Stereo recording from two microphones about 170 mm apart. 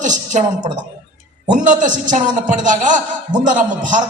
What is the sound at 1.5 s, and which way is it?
A man's voice, 45° right (ahead or behind).